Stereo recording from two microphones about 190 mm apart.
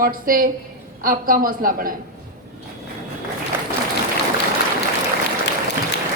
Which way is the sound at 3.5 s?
10° right (ahead or behind).